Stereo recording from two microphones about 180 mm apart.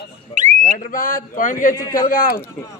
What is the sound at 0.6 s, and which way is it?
Speech, 50° left (ahead or behind).